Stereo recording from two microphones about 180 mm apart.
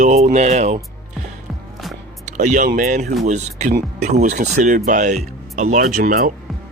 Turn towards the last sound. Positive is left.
turn(degrees=-55)  # may be behind; listen again after turning